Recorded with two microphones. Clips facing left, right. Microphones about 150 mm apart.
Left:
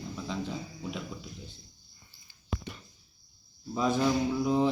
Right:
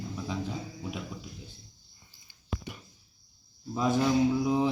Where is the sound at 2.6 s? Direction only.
15° right (ahead or behind).